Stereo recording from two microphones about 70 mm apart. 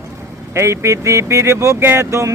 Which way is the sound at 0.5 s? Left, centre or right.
Right.